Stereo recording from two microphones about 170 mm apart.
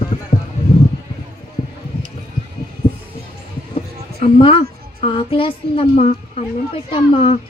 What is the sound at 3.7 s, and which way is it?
A woman's voice, 35° left (ahead or behind).